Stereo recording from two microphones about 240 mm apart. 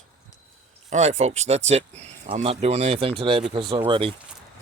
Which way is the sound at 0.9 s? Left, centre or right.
Right.